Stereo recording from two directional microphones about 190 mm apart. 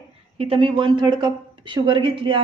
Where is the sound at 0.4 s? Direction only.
30° right (ahead or behind).